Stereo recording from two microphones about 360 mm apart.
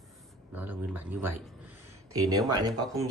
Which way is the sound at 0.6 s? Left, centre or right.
Centre.